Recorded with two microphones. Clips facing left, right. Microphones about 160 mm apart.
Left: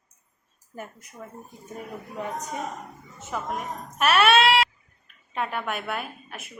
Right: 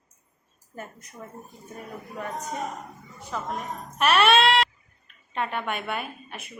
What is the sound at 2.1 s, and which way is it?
A woman's voice, 15° left (ahead or behind).